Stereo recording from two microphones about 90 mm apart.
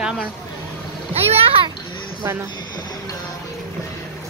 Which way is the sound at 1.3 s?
90° right.